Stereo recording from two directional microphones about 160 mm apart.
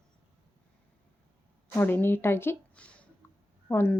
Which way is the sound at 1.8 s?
10° left (ahead or behind).